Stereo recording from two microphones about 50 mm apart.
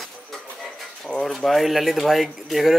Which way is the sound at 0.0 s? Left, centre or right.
Centre.